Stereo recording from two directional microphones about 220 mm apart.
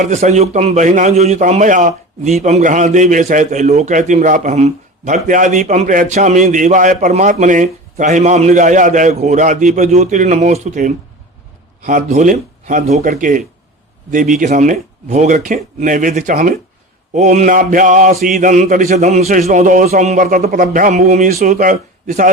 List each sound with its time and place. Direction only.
0.0 s a man's voice: 30° right (ahead or behind)